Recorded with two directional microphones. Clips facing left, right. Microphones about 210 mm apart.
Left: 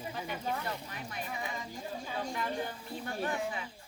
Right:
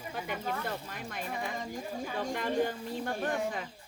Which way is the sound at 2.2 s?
50° right (ahead or behind).